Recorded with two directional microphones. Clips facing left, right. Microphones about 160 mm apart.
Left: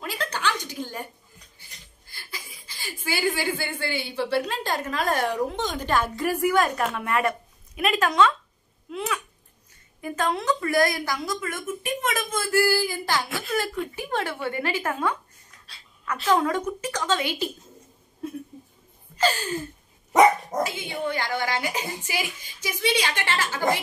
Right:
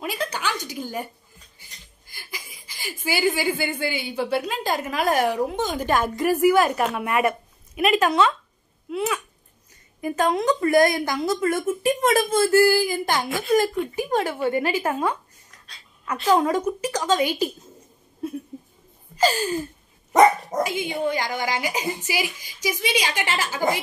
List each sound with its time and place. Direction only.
0.0 s a sound: 10° right (ahead or behind)
2.0 s a woman's voice: 15° right (ahead or behind)
11.4 s a woman's voice: 35° right (ahead or behind); by 15.1 s 10° right (ahead or behind)
16.3 s a woman's voice: 10° right (ahead or behind)
19.1 s a woman's voice: 10° right (ahead or behind)
20.6 s a woman's voice: 15° right (ahead or behind)